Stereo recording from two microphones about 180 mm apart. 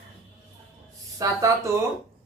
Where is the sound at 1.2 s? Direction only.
15° right (ahead or behind).